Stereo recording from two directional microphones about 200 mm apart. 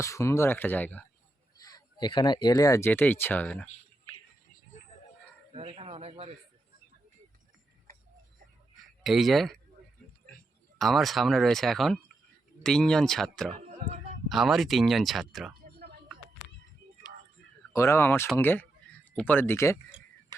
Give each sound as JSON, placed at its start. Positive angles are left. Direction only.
{"t": 0.0, "sound": "speech", "side_deg": 15}
{"t": 5.5, "sound": "speech", "side_deg": -30}
{"t": 9.0, "sound": "speech", "side_deg": 0}
{"t": 10.8, "sound": "speech", "side_deg": 0}
{"t": 17.7, "sound": "speech", "side_deg": 15}